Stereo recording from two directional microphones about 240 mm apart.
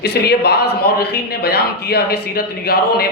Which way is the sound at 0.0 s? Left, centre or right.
Left.